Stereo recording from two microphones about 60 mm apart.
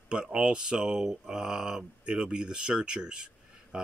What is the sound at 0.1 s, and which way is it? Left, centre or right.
Speech, centre.